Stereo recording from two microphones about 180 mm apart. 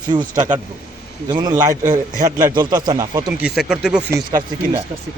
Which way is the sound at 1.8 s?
50° right (ahead or behind).